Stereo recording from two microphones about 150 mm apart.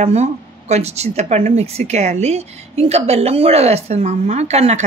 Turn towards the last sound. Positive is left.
turn(degrees=-45)  # may be behind; listen again after turning